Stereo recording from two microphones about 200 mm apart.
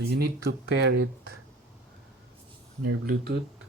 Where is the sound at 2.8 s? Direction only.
55° right (ahead or behind).